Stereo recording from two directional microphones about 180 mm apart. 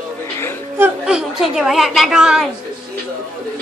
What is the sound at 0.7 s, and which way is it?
A woman's voice, 10° right (ahead or behind).